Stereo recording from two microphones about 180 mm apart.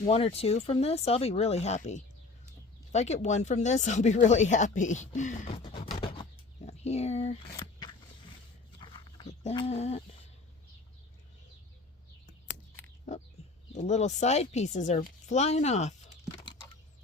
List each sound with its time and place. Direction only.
0.0 s speech: 35° left (ahead or behind)
7.5 s a sound: 25° left (ahead or behind)
8.8 s dog: 25° left (ahead or behind)
9.6 s speech: 35° left (ahead or behind)
13.1 s speech: 40° left (ahead or behind)